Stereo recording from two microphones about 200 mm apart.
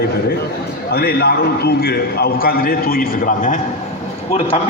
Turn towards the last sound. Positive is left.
turn(degrees=30)  # may be behind; listen again after turning